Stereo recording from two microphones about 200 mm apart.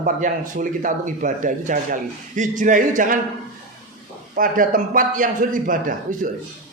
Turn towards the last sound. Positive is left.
turn(degrees=-40)  # may be behind; listen again after turning